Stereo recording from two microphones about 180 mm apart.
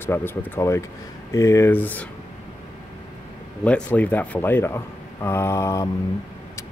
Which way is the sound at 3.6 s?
10° left (ahead or behind).